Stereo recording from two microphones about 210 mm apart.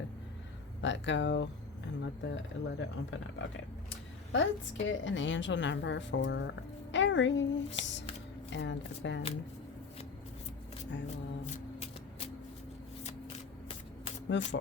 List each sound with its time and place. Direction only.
0.8 s a woman's voice: 60° left (ahead or behind)
11.5 s music: 30° left (ahead or behind)
14.3 s a woman's voice: 60° left (ahead or behind)